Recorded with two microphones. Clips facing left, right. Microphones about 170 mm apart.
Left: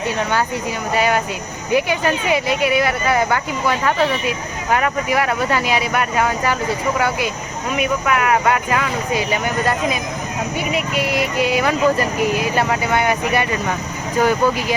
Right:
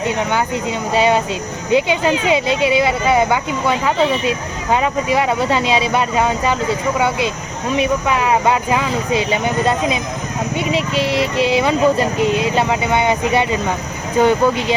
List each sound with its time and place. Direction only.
0.2 s speech: 15° right (ahead or behind)